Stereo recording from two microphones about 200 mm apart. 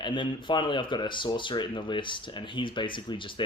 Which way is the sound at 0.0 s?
25° left (ahead or behind).